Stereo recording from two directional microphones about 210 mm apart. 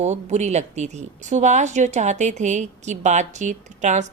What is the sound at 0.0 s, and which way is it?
A woman's voice, 35° right (ahead or behind).